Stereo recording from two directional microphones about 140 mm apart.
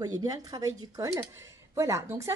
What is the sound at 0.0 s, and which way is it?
Speech, 25° right (ahead or behind).